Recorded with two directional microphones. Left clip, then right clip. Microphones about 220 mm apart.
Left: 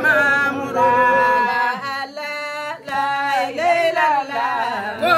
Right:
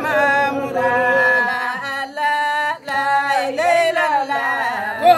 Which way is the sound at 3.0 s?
20° right (ahead or behind).